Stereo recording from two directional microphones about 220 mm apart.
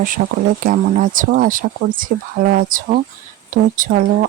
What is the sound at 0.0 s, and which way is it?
Speech, 40° right (ahead or behind).